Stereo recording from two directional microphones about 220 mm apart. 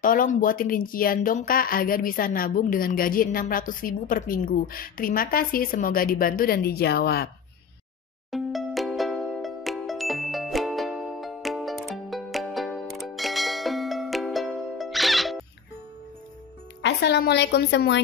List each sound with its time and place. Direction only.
0.0 s a woman's voice: 40° left (ahead or behind)
8.3 s music: centre (ahead or behind)
16.8 s a woman's voice: 50° left (ahead or behind)